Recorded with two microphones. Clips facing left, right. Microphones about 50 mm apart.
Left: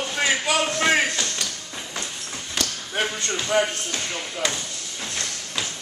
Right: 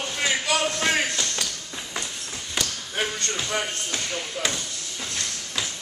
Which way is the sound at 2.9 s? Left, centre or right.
Centre.